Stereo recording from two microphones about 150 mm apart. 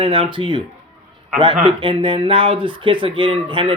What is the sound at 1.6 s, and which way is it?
Speech, 35° right (ahead or behind).